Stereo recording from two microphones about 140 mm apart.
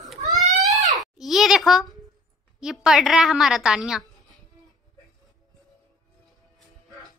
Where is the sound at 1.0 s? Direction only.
Centre (ahead or behind).